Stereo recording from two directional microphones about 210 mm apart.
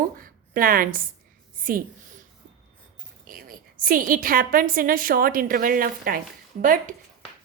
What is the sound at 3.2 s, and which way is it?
A woman's voice, 40° right (ahead or behind).